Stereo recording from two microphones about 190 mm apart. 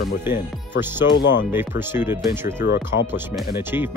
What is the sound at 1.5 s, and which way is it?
Speech, 10° right (ahead or behind).